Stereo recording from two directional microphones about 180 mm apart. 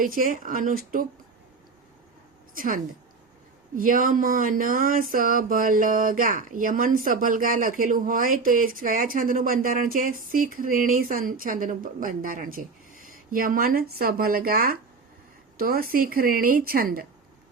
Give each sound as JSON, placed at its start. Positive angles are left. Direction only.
{"t": 0.0, "sound": "speech", "side_deg": -50}
{"t": 2.6, "sound": "speech", "side_deg": -45}